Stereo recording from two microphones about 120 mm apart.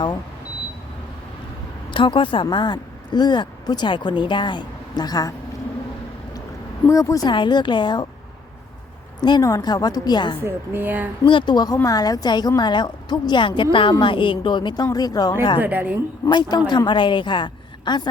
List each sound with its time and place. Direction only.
1.9 s speech: 45° left (ahead or behind)
6.8 s a woman's voice: 25° left (ahead or behind)
7.3 s a woman's voice: 40° left (ahead or behind)
9.2 s a woman's voice: 35° left (ahead or behind)
10.4 s a woman's voice: 15° right (ahead or behind)
11.3 s a woman's voice: 40° left (ahead or behind)
15.6 s a woman's voice: 15° right (ahead or behind)
16.3 s a woman's voice: 40° left (ahead or behind)